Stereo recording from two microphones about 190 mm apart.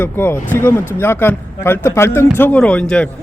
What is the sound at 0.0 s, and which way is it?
Speech, 10° left (ahead or behind).